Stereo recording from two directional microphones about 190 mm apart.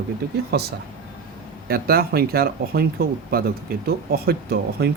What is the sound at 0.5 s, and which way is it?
Speech, 60° right (ahead or behind).